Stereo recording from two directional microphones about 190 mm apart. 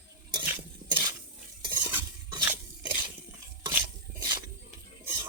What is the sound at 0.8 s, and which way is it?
Dishes, 20° right (ahead or behind).